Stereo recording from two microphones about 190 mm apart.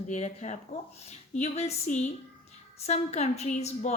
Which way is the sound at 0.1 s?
40° left (ahead or behind).